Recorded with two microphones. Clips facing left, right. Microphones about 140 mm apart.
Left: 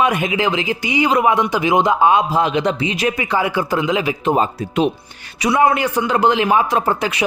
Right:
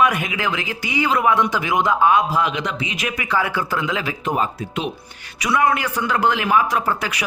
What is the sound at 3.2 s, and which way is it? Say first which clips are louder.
Speech: left 3 dB; 20° left (ahead or behind).